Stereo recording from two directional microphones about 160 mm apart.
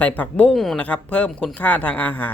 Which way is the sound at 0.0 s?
10° left (ahead or behind).